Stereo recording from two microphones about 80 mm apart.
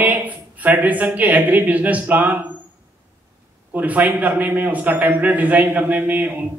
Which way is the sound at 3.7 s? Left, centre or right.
Right.